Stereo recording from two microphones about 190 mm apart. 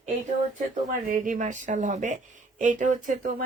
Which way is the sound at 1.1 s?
45° right (ahead or behind).